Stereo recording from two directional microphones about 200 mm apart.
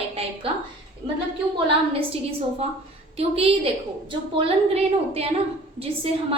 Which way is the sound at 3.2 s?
30° right (ahead or behind).